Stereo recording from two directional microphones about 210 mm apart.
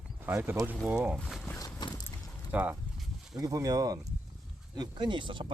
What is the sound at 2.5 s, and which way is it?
Speech, 10° right (ahead or behind).